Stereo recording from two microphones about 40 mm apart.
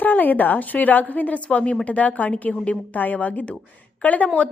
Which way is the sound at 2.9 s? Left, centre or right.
Left.